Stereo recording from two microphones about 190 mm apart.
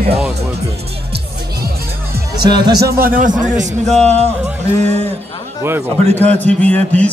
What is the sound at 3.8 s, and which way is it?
Music, 5° left (ahead or behind).